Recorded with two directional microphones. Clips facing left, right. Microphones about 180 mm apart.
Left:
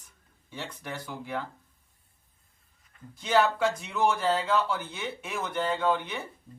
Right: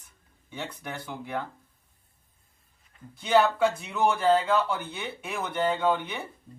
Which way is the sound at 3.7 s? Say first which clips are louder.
Right 1 dB; centre (ahead or behind).